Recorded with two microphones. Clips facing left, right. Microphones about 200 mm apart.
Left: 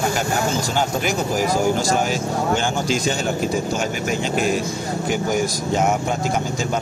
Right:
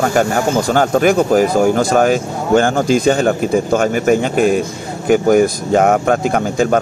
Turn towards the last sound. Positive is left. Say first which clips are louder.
# right 8 dB
turn(degrees=-60)  # may be behind; listen again after turning